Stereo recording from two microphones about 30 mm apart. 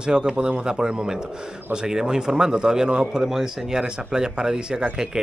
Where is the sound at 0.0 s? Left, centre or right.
Right.